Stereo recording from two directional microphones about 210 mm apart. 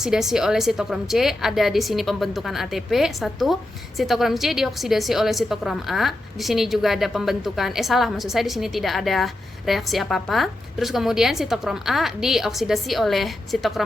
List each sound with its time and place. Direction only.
0.0 s a woman's voice: centre (ahead or behind)